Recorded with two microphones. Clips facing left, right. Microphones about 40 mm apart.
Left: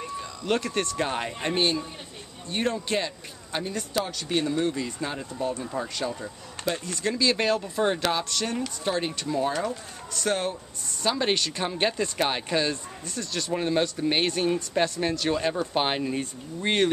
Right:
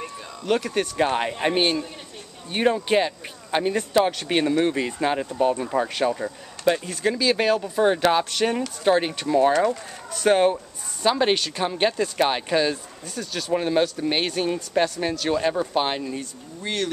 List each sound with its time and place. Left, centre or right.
0.5 s speech: centre
1.0 s speech: right
8.1 s speech: right
11.0 s speech: centre
11.3 s speech: centre
15.7 s speech: centre
16.2 s speech: left